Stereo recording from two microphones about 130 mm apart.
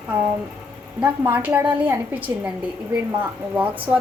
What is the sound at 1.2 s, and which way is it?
A woman's voice, 20° right (ahead or behind).